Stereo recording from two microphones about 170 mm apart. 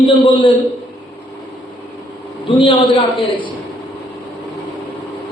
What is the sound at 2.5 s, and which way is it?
Speech, 30° left (ahead or behind).